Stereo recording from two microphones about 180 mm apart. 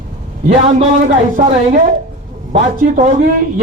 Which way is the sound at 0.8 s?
45° right (ahead or behind).